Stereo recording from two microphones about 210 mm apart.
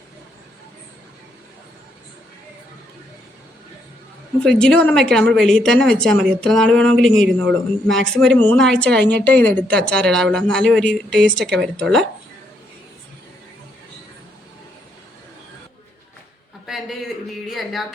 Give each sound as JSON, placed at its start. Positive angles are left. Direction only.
{"t": 4.4, "sound": "a woman's voice", "side_deg": 5}
{"t": 16.6, "sound": "a sound", "side_deg": 0}
{"t": 17.5, "sound": "a woman's voice", "side_deg": 0}